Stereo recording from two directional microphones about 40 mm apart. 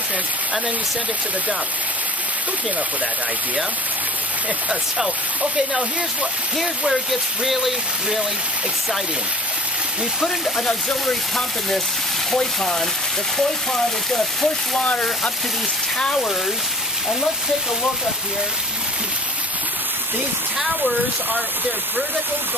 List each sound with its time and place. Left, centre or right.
4.6 s speech: centre
6.9 s speech: centre
12.3 s speech: centre
14.8 s speech: left
16.0 s speech: left